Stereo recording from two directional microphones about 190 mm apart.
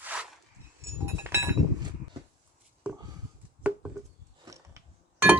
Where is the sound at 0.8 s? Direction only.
15° right (ahead or behind).